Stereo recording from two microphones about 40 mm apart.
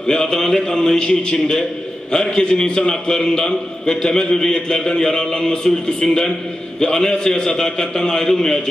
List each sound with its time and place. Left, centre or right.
0.0 s a man's voice: centre